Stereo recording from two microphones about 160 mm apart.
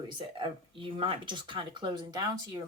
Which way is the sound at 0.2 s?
30° right (ahead or behind).